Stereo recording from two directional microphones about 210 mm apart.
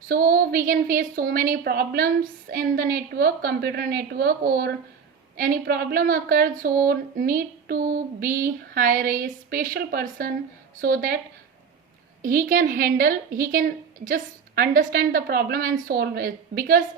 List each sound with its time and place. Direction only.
0.1 s a woman's voice: 45° right (ahead or behind)
12.2 s a woman's voice: 40° right (ahead or behind)